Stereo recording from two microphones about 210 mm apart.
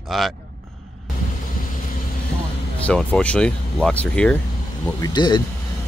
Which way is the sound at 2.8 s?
5° left (ahead or behind).